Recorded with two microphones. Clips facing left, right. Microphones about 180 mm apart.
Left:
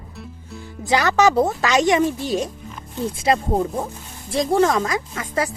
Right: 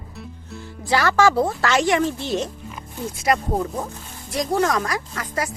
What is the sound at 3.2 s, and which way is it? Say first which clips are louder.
Speech: left 2 dB; 30° left (ahead or behind).